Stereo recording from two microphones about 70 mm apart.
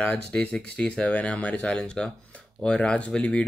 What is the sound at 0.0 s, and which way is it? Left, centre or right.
Speech, left.